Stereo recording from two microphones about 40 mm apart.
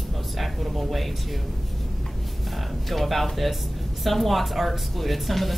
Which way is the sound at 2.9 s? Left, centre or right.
Centre.